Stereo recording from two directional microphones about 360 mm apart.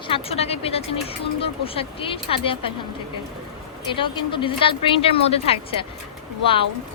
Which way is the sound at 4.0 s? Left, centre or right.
Centre.